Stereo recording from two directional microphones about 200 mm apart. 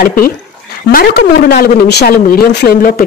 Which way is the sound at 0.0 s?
45° left (ahead or behind).